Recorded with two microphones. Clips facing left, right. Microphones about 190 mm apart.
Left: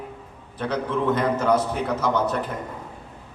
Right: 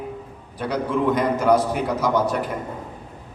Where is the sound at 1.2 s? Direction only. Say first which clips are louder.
Right 3 dB; 15° right (ahead or behind).